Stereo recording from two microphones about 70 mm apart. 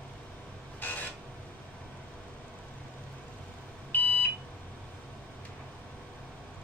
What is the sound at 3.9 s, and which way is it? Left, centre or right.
Smoke detector, left.